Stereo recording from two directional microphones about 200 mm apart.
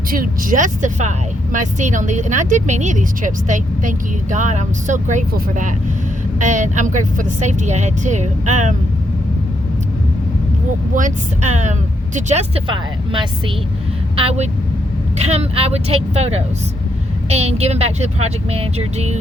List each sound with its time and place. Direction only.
0.1 s speech: 45° right (ahead or behind)
10.9 s speech: 40° right (ahead or behind)